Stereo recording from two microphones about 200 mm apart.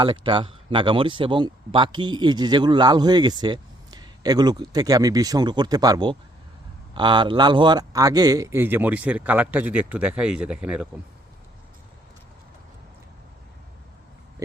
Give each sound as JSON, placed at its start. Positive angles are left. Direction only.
{"t": 0.0, "sound": "a man's voice", "side_deg": -25}